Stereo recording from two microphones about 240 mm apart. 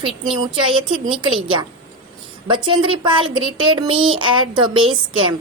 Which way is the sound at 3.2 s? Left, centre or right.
Right.